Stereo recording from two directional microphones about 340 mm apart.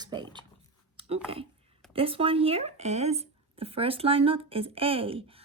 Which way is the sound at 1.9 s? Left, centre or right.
Centre.